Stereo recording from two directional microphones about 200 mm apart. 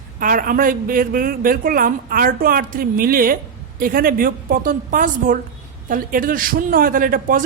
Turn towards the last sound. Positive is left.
turn(degrees=-45)  # may be behind; listen again after turning